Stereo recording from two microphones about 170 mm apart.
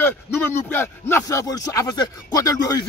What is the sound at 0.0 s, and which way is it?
Speech, 15° left (ahead or behind).